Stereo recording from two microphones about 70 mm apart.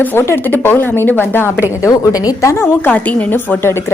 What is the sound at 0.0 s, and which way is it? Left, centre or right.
A woman's voice, left.